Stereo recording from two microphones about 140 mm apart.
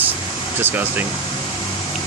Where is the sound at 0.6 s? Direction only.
15° right (ahead or behind).